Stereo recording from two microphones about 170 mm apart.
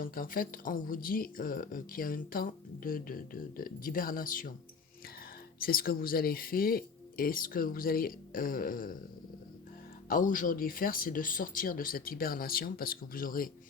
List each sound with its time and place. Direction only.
0.0 s speech: 55° left (ahead or behind)
5.5 s speech: 60° left (ahead or behind)
10.1 s speech: 50° left (ahead or behind)